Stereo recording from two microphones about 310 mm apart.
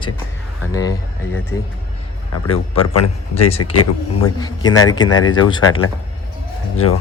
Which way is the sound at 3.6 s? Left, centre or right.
Left.